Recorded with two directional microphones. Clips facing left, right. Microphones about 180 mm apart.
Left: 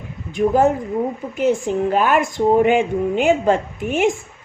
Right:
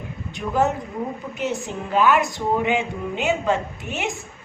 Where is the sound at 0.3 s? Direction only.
50° left (ahead or behind).